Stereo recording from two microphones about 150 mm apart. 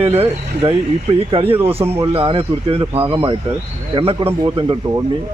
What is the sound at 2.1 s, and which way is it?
Speech, 40° right (ahead or behind).